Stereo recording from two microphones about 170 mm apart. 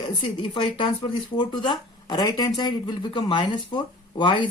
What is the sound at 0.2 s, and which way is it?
Speech, 30° left (ahead or behind).